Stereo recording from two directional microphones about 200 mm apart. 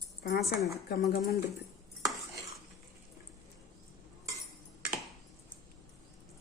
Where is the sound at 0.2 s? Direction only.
50° left (ahead or behind).